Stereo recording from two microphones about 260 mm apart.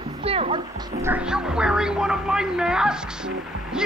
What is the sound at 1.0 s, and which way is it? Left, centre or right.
Speech, centre.